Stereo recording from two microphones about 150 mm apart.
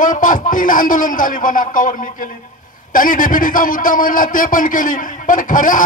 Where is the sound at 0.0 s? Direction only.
60° left (ahead or behind).